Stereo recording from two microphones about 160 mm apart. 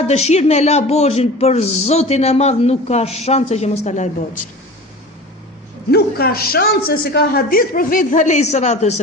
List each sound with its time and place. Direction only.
0.1 s speech: 45° left (ahead or behind)
5.9 s a man's voice: 70° left (ahead or behind); by 9.0 s 45° left (ahead or behind)